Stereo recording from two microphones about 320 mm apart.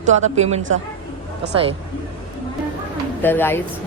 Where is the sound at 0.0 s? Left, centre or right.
Right.